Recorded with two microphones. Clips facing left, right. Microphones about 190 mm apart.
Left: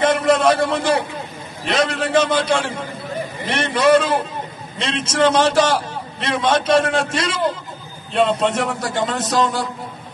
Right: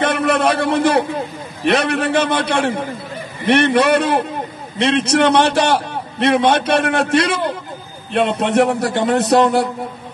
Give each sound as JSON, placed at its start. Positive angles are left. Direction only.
{"t": 0.0, "sound": "a man's voice", "side_deg": -65}